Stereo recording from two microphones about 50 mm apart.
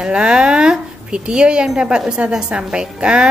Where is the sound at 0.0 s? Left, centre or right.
Centre.